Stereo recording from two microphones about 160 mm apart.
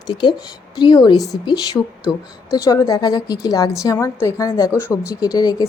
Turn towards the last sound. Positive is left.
turn(degrees=25)  # may be behind; listen again after turning